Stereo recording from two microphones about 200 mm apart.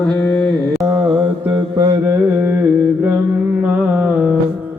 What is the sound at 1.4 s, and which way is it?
Mantra, 15° right (ahead or behind).